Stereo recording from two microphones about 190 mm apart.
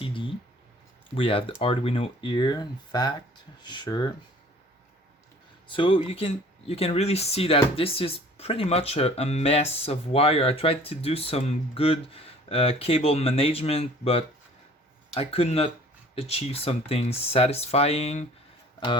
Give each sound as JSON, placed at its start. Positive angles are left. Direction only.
{"t": 0.0, "sound": "a sound", "side_deg": 25}
{"t": 1.1, "sound": "speech", "side_deg": 30}
{"t": 5.6, "sound": "speech", "side_deg": 25}